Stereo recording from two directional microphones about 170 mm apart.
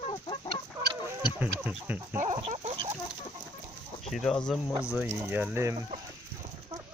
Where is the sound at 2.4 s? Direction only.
40° right (ahead or behind).